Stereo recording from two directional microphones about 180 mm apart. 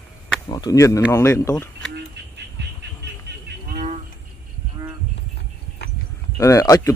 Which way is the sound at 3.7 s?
50° right (ahead or behind).